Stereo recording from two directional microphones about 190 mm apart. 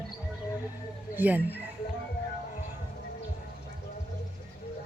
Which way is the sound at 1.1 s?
10° right (ahead or behind).